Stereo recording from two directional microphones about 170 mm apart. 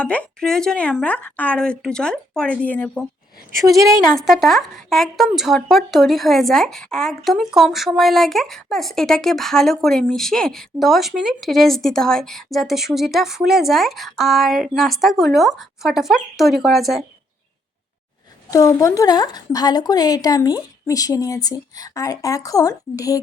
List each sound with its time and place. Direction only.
0.0 s speech: 10° left (ahead or behind)
3.7 s a woman's voice: 20° right (ahead or behind)
4.1 s speech: centre (ahead or behind)
18.5 s a woman's voice: 20° left (ahead or behind)